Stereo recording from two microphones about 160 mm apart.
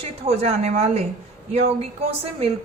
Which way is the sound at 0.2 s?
40° right (ahead or behind).